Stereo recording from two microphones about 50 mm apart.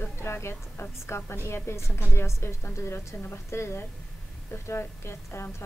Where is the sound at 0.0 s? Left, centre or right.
Left.